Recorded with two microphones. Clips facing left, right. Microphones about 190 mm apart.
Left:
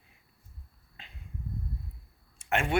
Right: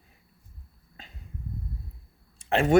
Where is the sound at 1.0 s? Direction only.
45° right (ahead or behind).